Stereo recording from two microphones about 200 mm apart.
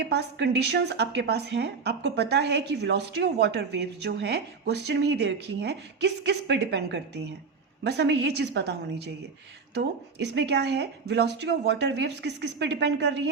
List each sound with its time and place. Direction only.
0.0 s speech: 55° right (ahead or behind)